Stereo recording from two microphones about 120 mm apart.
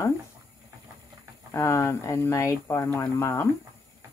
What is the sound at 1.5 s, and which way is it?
Speech, 25° left (ahead or behind).